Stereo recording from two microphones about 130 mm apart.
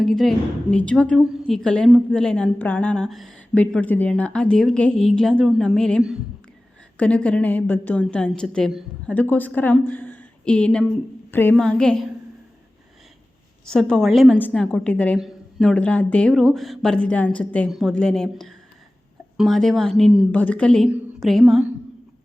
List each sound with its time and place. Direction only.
0.0 s a woman's voice: centre (ahead or behind)
11.5 s a woman's voice: 5° left (ahead or behind)
13.7 s a woman's voice: 5° left (ahead or behind)
15.2 s a sound: 5° right (ahead or behind)
15.6 s a woman's voice: 10° left (ahead or behind)